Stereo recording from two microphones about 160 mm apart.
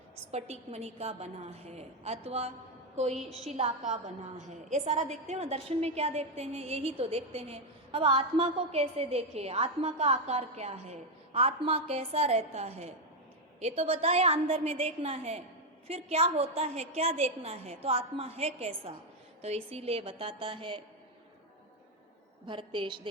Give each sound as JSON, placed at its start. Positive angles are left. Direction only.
{"t": 0.3, "sound": "a woman's voice", "side_deg": -40}
{"t": 22.4, "sound": "a woman's voice", "side_deg": -30}